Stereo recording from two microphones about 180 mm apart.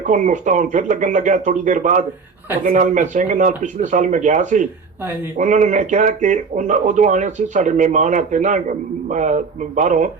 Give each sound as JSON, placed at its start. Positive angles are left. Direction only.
{"t": 0.0, "sound": "speech", "side_deg": -45}